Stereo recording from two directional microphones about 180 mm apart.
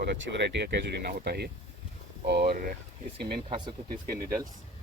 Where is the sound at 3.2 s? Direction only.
60° right (ahead or behind).